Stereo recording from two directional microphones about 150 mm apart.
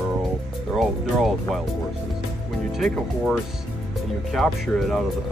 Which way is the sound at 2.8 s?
5° left (ahead or behind).